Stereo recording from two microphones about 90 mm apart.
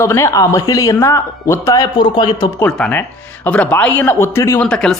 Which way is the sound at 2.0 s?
55° left (ahead or behind).